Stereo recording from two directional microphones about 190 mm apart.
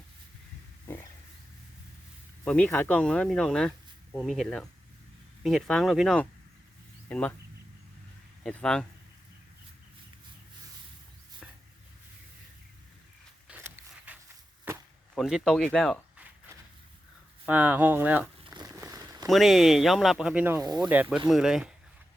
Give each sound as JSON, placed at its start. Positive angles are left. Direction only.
{"t": 2.4, "sound": "speech", "side_deg": 5}
{"t": 8.4, "sound": "speech", "side_deg": 5}
{"t": 13.5, "sound": "a sound", "side_deg": -10}
{"t": 14.7, "sound": "chop", "side_deg": -10}
{"t": 15.1, "sound": "speech", "side_deg": 0}
{"t": 17.4, "sound": "speech", "side_deg": -10}
{"t": 18.4, "sound": "a sound", "side_deg": -20}
{"t": 19.3, "sound": "speech", "side_deg": 0}